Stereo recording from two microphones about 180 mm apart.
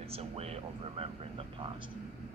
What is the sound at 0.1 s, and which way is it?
Speech, 35° right (ahead or behind).